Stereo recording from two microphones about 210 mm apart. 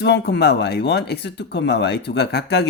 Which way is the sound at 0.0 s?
55° left (ahead or behind).